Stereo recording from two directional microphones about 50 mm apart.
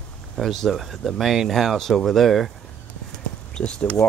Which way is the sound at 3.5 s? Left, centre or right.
Centre.